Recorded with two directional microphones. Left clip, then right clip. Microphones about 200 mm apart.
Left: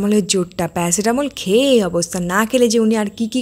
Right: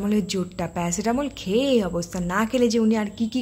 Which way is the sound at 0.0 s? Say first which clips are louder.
Left 9 dB; 35° left (ahead or behind).